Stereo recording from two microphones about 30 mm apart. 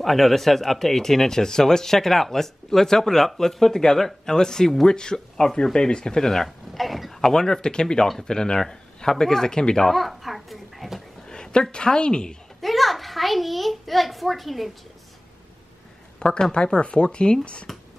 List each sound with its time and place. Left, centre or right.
0.0 s speech: centre
4.8 s speech: left
6.3 s speech: centre
7.2 s speech: left
8.5 s speech: centre
9.8 s speech: centre
11.2 s a woman's voice: left
12.6 s a child's voice: centre
16.2 s speech: left
16.5 s speech: left
17.7 s beatboxing: centre